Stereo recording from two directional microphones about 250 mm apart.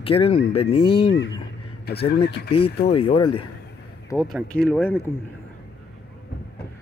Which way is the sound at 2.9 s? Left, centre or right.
Left.